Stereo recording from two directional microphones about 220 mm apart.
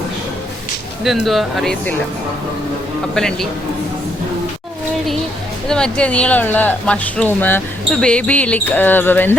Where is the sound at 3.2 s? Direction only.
Centre (ahead or behind).